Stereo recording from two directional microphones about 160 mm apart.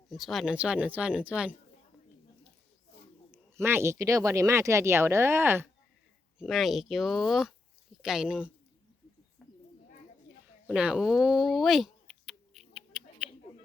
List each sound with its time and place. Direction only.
0.1 s speech: centre (ahead or behind)
3.3 s speech: 15° right (ahead or behind)
6.4 s speech: centre (ahead or behind)
9.4 s bird: 5° left (ahead or behind)
10.7 s a sound: 5° right (ahead or behind)